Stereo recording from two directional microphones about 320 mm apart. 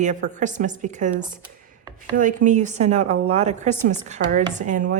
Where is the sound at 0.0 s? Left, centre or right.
Right.